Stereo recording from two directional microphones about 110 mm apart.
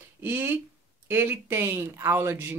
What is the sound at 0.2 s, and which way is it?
Speech, 20° right (ahead or behind).